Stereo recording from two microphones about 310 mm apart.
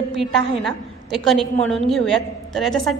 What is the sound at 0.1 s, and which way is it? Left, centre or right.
A woman's voice, centre.